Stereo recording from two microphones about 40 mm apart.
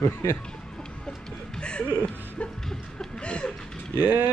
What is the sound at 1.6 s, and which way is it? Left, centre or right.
Music, left.